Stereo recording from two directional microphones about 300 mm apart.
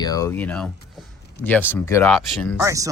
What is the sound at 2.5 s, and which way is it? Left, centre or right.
Speech, centre.